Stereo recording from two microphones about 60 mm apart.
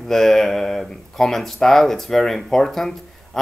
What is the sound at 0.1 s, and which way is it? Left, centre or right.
Speech, centre.